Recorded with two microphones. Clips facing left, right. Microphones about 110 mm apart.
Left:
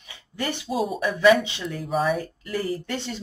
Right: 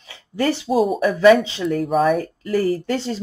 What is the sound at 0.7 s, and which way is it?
Speech, 30° right (ahead or behind).